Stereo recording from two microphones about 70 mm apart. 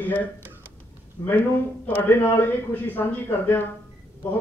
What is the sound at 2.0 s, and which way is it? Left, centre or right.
A man's voice, left.